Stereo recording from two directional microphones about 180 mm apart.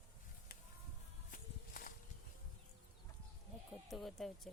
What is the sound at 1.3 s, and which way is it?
Walk, 50° left (ahead or behind).